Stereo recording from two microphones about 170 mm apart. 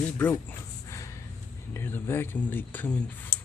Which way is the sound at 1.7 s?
15° left (ahead or behind).